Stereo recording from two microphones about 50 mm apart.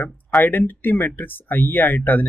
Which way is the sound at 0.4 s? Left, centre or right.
Left.